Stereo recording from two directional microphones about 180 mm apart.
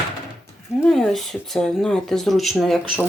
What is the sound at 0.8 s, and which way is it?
Speech, centre (ahead or behind).